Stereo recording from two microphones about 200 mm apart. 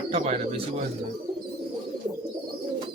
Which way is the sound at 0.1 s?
30° right (ahead or behind).